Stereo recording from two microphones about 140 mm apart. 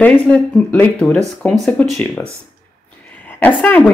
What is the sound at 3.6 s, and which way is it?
Speech, 5° left (ahead or behind).